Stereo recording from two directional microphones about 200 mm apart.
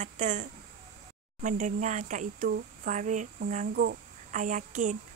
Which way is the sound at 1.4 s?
40° right (ahead or behind).